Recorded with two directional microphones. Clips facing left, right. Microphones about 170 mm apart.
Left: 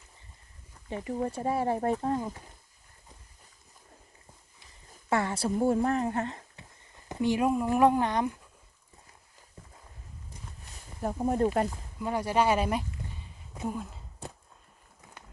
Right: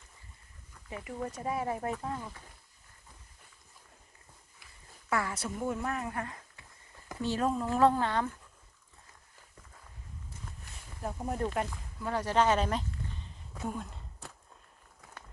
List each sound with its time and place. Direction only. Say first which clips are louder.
0.9 s speech: left 6 dB; 35° left (ahead or behind)
4.6 s speech: left 3 dB; 25° left (ahead or behind)
7.1 s speech: left 5 dB; 15° left (ahead or behind)
11.0 s speech: left 7 dB; 35° left (ahead or behind)
11.9 s a sound: left 1 dB; 15° left (ahead or behind)
13.7 s speech: left 3 dB; 5° left (ahead or behind)